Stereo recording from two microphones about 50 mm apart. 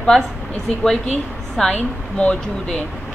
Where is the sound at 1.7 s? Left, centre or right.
Left.